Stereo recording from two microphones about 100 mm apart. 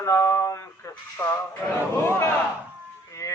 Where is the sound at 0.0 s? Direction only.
30° left (ahead or behind).